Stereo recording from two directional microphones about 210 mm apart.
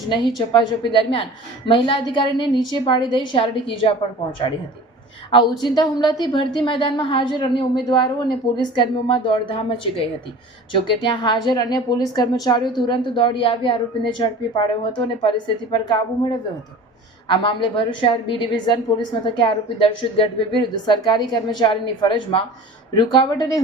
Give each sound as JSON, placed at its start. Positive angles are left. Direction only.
{"t": 0.3, "sound": "a woman's voice", "side_deg": 20}
{"t": 5.3, "sound": "a woman's voice", "side_deg": 20}
{"t": 17.2, "sound": "a woman's voice", "side_deg": 25}